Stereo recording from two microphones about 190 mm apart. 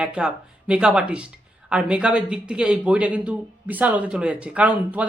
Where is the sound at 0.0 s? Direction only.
5° right (ahead or behind).